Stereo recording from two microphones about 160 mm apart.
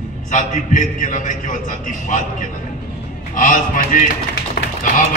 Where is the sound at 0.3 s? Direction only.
50° left (ahead or behind).